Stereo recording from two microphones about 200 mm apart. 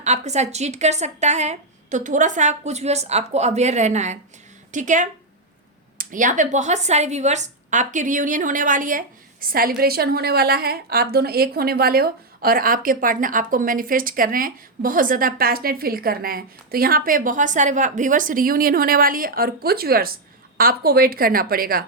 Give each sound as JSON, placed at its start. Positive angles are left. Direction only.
{"t": 0.0, "sound": "a woman's voice", "side_deg": -35}